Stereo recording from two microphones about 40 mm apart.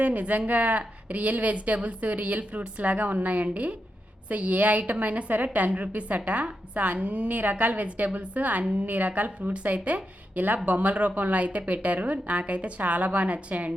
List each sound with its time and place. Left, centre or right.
0.0 s a woman's voice: right
7.6 s a woman's voice: right